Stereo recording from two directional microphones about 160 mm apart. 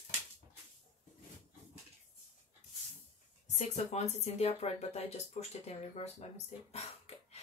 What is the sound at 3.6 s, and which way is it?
Speech, 45° left (ahead or behind).